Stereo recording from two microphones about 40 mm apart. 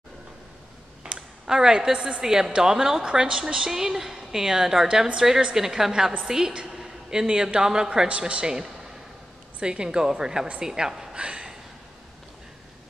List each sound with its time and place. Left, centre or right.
1.0 s a sound: right
1.6 s a woman's voice: centre
3.0 s a woman's voice: right